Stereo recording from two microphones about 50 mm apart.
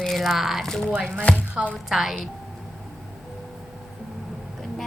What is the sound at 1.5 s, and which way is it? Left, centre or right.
Speech, right.